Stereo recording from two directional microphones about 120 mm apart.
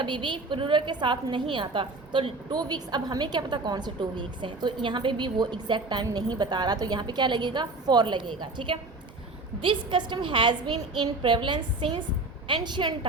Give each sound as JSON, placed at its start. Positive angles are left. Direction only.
{"t": 0.0, "sound": "a woman's voice", "side_deg": -40}